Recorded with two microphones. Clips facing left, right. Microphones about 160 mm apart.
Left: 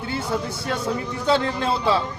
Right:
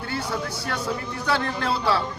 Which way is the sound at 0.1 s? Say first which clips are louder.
Left 3 dB; 25° left (ahead or behind).